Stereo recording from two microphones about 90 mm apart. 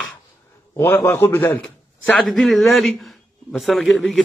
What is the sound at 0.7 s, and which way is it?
Speech, 25° left (ahead or behind).